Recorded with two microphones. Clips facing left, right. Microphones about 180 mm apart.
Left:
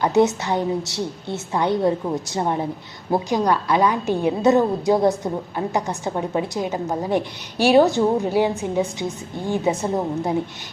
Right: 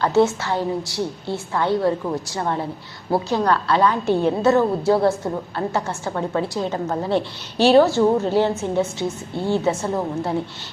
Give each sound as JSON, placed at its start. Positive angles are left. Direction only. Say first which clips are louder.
{"t": 0.0, "sound": "a woman's voice", "louder": "even", "side_deg": 15}